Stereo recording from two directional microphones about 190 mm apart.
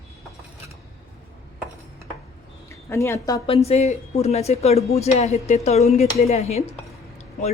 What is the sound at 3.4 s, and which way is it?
A woman's voice, 30° left (ahead or behind).